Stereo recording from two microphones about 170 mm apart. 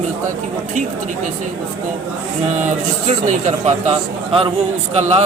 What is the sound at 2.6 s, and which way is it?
Speech, 45° right (ahead or behind).